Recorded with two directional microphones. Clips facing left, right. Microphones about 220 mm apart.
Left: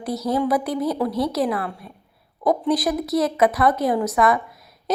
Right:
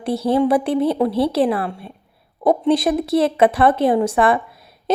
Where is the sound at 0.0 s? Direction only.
30° right (ahead or behind).